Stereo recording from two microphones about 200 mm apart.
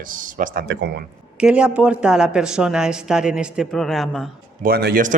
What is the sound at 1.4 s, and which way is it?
A woman's voice, 5° right (ahead or behind).